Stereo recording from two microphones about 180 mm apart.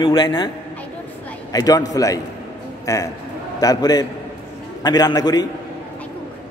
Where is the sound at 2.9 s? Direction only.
20° left (ahead or behind).